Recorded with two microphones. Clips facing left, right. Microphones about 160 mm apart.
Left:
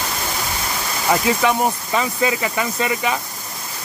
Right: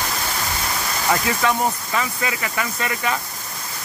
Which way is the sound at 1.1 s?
15° left (ahead or behind).